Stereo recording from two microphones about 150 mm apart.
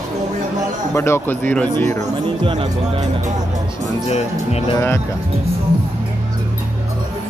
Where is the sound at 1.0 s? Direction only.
15° left (ahead or behind).